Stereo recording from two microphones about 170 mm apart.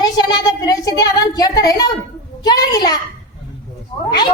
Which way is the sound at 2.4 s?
25° left (ahead or behind).